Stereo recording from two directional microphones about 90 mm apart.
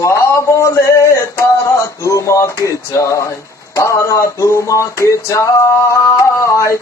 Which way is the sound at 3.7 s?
35° left (ahead or behind).